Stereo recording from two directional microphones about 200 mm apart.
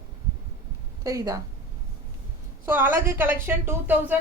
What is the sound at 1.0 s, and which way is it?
Speech, 15° right (ahead or behind).